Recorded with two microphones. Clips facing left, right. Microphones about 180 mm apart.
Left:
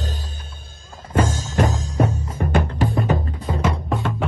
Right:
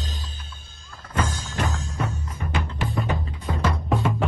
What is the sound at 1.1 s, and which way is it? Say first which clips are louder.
Music: left 6 dB; 45° left (ahead or behind).